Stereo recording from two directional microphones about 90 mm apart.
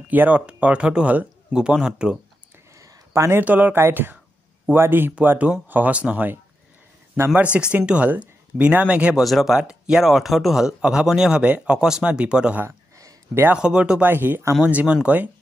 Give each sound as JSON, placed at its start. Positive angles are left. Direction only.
{"t": 0.1, "sound": "speech", "side_deg": -15}
{"t": 2.7, "sound": "speech", "side_deg": -35}
{"t": 7.7, "sound": "speech", "side_deg": -15}
{"t": 9.1, "sound": "speech", "side_deg": 0}
{"t": 12.6, "sound": "a sound", "side_deg": -40}
{"t": 13.6, "sound": "speech", "side_deg": -10}
{"t": 14.0, "sound": "speech", "side_deg": -25}